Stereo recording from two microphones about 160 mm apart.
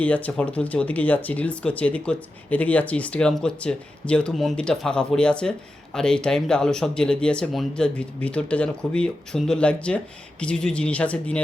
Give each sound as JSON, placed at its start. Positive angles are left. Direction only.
{"t": 0.0, "sound": "speech", "side_deg": 10}